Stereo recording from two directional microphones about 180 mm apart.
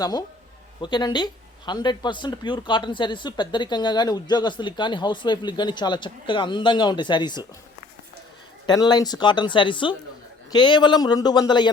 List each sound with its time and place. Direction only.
0.0 s speech: 20° left (ahead or behind)
8.6 s speech: 25° left (ahead or behind)